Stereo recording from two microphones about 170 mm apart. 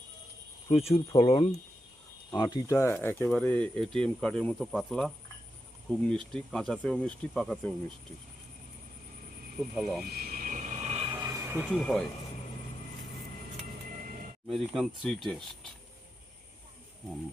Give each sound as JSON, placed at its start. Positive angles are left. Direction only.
{"t": 0.7, "sound": "speech", "side_deg": 35}
{"t": 9.7, "sound": "speech", "side_deg": 0}
{"t": 10.1, "sound": "vehicle", "side_deg": -65}
{"t": 11.1, "sound": "a sound", "side_deg": -15}
{"t": 11.7, "sound": "speech", "side_deg": 5}
{"t": 14.4, "sound": "speech", "side_deg": 0}